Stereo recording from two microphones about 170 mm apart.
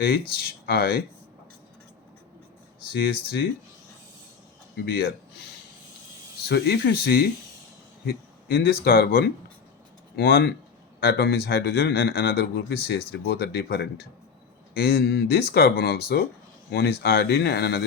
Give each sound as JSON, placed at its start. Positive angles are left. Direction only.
{"t": 0.0, "sound": "speech", "side_deg": 65}
{"t": 2.9, "sound": "speech", "side_deg": 65}
{"t": 4.9, "sound": "speech", "side_deg": 65}
{"t": 6.5, "sound": "speech", "side_deg": 70}